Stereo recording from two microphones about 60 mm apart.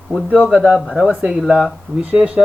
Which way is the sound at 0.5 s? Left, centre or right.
Right.